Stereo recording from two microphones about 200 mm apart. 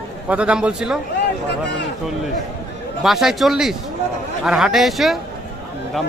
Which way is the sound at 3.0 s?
Centre (ahead or behind).